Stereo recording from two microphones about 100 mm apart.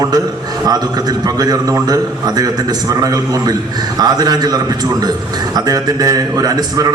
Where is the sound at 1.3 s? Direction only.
40° right (ahead or behind).